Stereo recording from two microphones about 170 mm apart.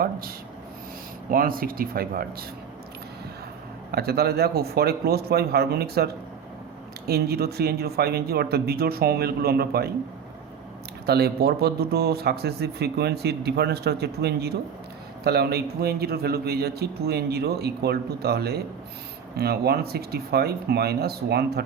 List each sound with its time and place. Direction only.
0.0 s speech: 60° right (ahead or behind)
3.9 s speech: 70° right (ahead or behind)
7.1 s speech: 70° right (ahead or behind)
11.0 s speech: 70° right (ahead or behind)